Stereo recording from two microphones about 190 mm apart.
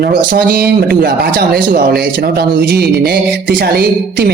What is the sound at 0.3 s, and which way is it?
Speech, 50° right (ahead or behind).